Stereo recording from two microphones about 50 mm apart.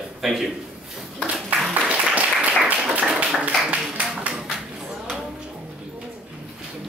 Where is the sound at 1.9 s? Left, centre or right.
Right.